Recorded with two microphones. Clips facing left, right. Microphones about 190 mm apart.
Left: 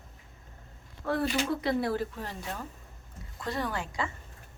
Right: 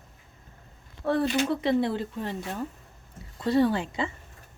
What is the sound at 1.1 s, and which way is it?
Speech, 25° right (ahead or behind).